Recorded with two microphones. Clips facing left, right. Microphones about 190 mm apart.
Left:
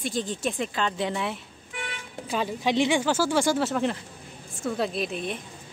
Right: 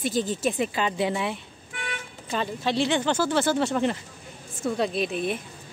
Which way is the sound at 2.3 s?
10° left (ahead or behind).